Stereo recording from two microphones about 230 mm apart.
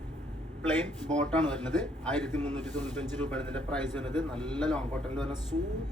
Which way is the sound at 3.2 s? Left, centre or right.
Centre.